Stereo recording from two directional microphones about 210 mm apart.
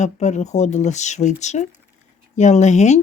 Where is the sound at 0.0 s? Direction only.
35° left (ahead or behind).